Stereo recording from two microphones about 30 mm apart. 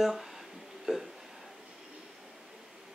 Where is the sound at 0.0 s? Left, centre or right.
Centre.